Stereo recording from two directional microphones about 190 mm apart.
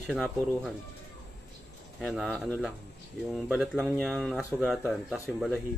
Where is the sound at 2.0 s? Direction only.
Centre (ahead or behind).